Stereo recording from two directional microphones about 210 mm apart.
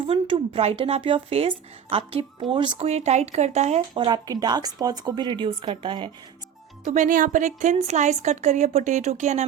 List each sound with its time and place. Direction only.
0.0 s speech: 25° right (ahead or behind)
6.8 s a woman's voice: 35° right (ahead or behind)